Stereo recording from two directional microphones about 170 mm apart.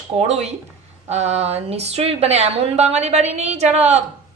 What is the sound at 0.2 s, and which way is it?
A woman's voice, 40° right (ahead or behind).